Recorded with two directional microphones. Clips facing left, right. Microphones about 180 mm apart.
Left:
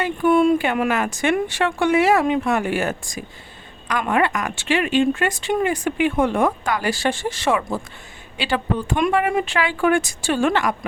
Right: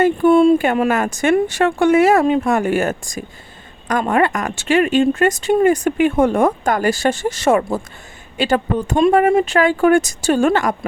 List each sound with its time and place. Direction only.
0.2 s speech: 30° right (ahead or behind)
0.9 s speech: 45° right (ahead or behind)